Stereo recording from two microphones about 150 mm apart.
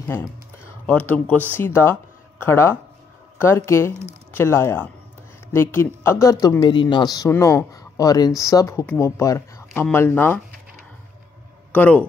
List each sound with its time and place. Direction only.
0.1 s speech: 15° left (ahead or behind)
11.7 s speech: 10° left (ahead or behind)